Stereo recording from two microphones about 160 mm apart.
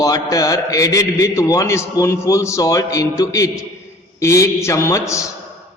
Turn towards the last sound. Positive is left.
turn(degrees=20)  # may be behind; listen again after turning